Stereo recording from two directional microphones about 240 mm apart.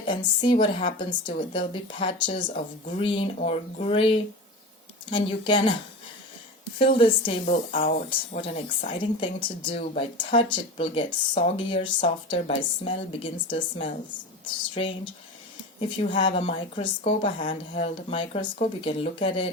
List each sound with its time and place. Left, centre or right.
0.1 s speech: left
6.7 s speech: left
7.8 s speech: left
8.4 s speech: left
16.0 s speech: left